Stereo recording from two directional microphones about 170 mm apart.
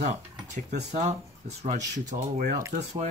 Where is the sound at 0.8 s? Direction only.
40° right (ahead or behind).